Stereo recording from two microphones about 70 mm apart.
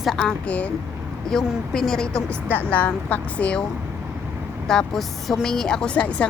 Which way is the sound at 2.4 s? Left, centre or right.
Left.